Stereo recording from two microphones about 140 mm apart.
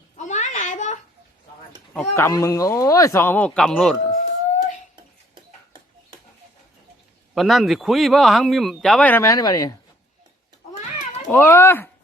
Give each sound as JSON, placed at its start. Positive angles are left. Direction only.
{"t": 0.2, "sound": "a sound", "side_deg": 60}
{"t": 1.9, "sound": "speech", "side_deg": 15}
{"t": 7.3, "sound": "speech", "side_deg": 0}
{"t": 9.2, "sound": "speech", "side_deg": 25}
{"t": 11.3, "sound": "speech", "side_deg": 15}